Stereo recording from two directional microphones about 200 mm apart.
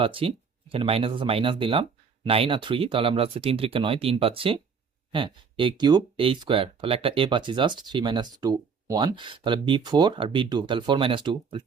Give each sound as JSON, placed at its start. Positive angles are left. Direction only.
{"t": 0.0, "sound": "speech", "side_deg": -25}